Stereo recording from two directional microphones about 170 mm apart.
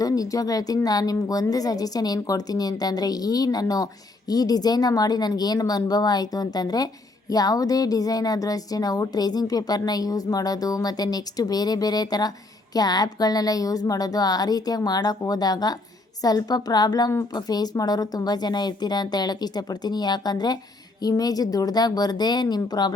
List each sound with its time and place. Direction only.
0.0 s speech: 20° left (ahead or behind)